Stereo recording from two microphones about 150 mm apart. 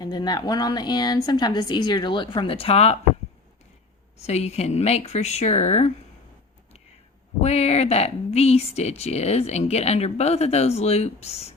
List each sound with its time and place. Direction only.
0.0 s speech: 25° left (ahead or behind); by 3.0 s 45° left (ahead or behind)
4.2 s a woman's voice: 45° left (ahead or behind)
7.4 s a woman's voice: 45° left (ahead or behind)